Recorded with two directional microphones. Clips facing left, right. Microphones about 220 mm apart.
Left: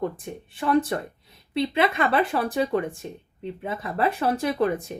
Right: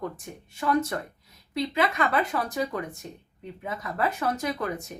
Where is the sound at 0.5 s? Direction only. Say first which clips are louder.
Left 3 dB; 30° left (ahead or behind).